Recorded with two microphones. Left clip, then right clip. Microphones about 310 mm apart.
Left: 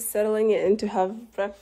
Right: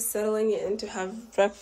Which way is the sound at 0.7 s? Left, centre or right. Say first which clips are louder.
Left 8 dB; centre.